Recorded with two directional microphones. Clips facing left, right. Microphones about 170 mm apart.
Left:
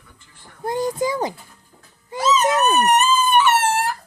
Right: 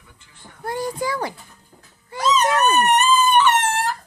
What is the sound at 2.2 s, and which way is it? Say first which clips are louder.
Dog: left 1 dB; 5° left (ahead or behind).